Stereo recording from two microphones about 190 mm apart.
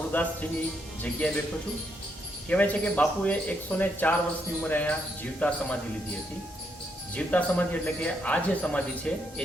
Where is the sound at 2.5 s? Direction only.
5° left (ahead or behind).